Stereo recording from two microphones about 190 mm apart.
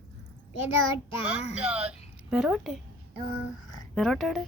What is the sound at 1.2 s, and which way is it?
Child singing, 5° right (ahead or behind).